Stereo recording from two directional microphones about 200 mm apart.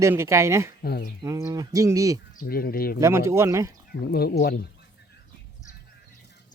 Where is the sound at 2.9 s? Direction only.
15° right (ahead or behind).